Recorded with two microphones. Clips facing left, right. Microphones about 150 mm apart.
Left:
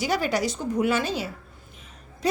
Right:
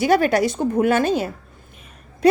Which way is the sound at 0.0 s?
55° right (ahead or behind).